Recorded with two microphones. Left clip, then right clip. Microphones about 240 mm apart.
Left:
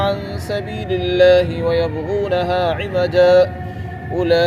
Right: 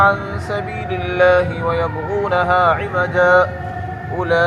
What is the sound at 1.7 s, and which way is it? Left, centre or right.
Speech, left.